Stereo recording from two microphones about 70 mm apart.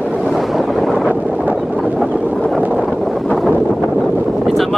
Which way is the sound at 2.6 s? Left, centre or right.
Centre.